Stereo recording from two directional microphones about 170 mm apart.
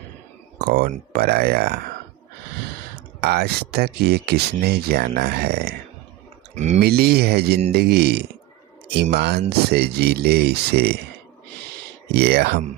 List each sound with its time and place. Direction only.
0.6 s speech: 65° right (ahead or behind)
3.2 s speech: 70° right (ahead or behind)
6.7 s speech: 70° right (ahead or behind)
12.1 s speech: 70° right (ahead or behind)